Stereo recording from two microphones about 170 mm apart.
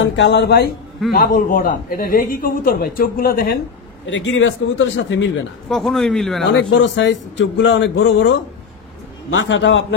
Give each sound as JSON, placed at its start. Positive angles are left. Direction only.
{"t": 0.0, "sound": "a man's voice", "side_deg": 90}
{"t": 1.1, "sound": "a man's voice", "side_deg": 55}
{"t": 4.0, "sound": "a man's voice", "side_deg": 90}
{"t": 5.7, "sound": "a man's voice", "side_deg": 0}
{"t": 6.5, "sound": "a man's voice", "side_deg": 90}
{"t": 9.5, "sound": "a man's voice", "side_deg": 90}